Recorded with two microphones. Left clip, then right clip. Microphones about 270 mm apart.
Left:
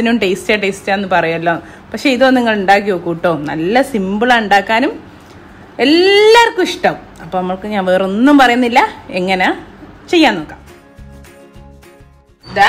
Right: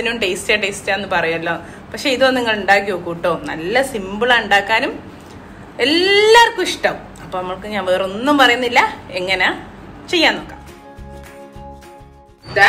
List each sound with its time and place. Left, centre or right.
0.0 s a woman's voice: left